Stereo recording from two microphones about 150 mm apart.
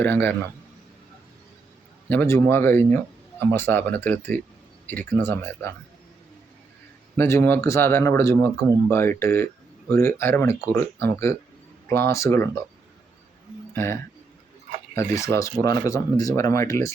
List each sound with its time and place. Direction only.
0.0 s speech: 15° left (ahead or behind)
2.0 s speech: 15° left (ahead or behind)
7.2 s speech: 15° left (ahead or behind)
13.7 s speech: 15° left (ahead or behind)